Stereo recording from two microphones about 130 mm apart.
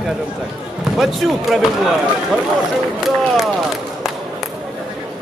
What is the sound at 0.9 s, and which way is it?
Speech, centre (ahead or behind).